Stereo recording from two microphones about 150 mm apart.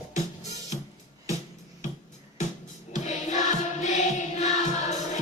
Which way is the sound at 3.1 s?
55° left (ahead or behind).